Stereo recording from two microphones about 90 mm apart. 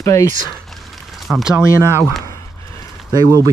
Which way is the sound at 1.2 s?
Centre (ahead or behind).